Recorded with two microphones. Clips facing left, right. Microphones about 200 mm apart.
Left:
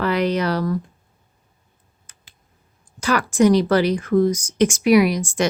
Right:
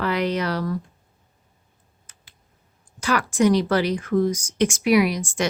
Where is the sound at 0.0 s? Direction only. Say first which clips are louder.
Left 3 dB; 40° left (ahead or behind).